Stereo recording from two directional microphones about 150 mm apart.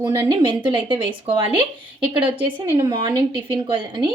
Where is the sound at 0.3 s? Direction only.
35° right (ahead or behind).